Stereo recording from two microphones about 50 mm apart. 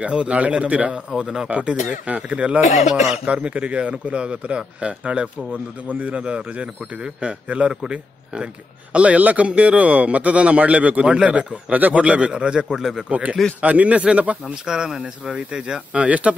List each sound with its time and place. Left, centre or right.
0.0 s speech: right
1.5 s speech: right
12.7 s speech: centre
13.1 s speech: right